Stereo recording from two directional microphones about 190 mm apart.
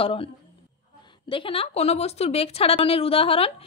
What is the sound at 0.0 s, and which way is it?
Speech, 30° left (ahead or behind).